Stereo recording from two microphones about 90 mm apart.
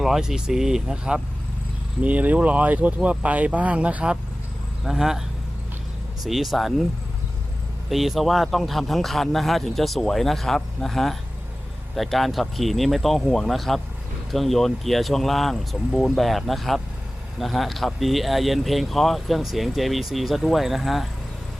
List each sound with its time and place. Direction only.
0.0 s speech: 5° right (ahead or behind)
6.2 s speech: centre (ahead or behind)
7.9 s speech: centre (ahead or behind)